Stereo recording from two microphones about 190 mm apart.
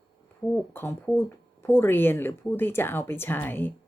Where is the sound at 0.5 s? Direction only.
10° left (ahead or behind).